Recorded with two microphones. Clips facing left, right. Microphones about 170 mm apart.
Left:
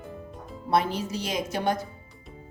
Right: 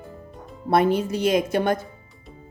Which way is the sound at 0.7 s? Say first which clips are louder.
Right 6 dB; 55° right (ahead or behind).